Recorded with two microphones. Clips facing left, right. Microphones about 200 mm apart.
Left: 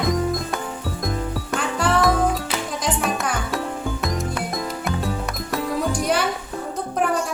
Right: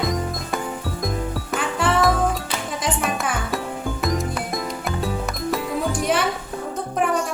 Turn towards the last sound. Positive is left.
turn(degrees=0)  # may be behind; listen again after turning